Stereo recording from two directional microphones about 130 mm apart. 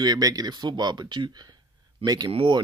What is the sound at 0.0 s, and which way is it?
Speech, 30° right (ahead or behind).